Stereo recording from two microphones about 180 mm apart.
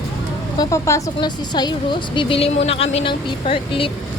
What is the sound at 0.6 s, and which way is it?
Speech, 15° left (ahead or behind).